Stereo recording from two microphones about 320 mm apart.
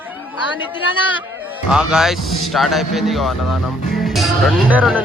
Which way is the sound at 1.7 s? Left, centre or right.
Centre.